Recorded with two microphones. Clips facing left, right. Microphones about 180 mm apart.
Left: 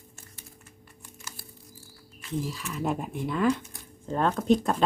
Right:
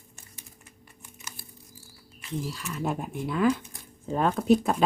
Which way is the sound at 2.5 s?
Centre (ahead or behind).